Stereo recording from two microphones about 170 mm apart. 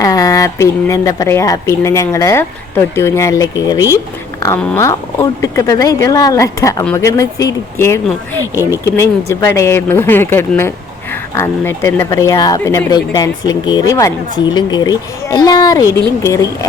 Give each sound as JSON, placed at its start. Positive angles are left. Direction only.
{"t": 0.0, "sound": "speech", "side_deg": 20}